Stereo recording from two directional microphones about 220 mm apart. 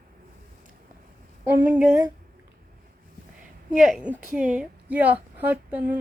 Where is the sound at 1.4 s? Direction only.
10° right (ahead or behind).